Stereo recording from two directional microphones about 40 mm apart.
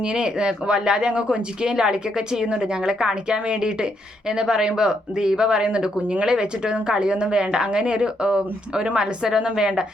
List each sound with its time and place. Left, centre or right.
0.0 s speech: right